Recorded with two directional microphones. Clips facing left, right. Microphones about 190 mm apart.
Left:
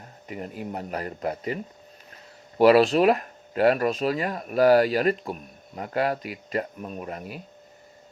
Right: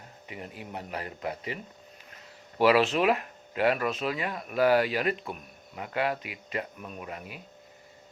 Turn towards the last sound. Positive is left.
turn(degrees=40)  # may be behind; listen again after turning